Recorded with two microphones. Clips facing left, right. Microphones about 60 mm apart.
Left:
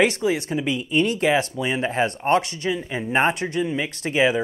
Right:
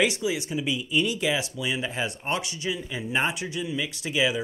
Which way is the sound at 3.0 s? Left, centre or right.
Left.